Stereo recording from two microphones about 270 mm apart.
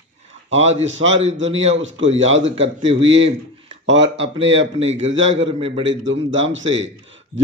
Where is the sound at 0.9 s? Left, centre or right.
Right.